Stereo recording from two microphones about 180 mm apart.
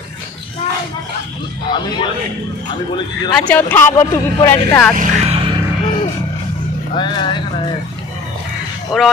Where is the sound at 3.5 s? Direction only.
10° left (ahead or behind).